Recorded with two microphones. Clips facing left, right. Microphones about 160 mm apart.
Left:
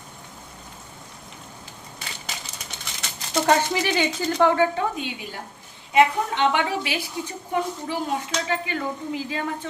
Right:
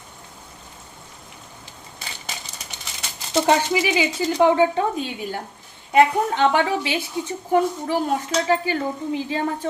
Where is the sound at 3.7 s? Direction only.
5° right (ahead or behind).